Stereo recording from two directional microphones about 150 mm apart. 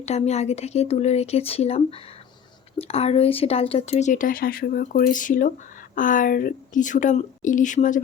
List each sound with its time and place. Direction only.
0.0 s speech: 45° left (ahead or behind)